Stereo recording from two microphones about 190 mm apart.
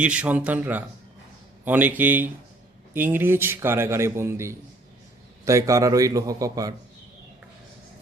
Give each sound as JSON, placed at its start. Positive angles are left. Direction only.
{"t": 0.0, "sound": "a man's voice", "side_deg": -5}